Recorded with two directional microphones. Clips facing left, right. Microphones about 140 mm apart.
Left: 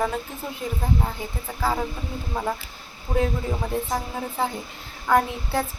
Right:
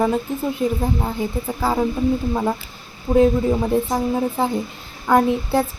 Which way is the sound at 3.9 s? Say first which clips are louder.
Right 8 dB; 25° right (ahead or behind).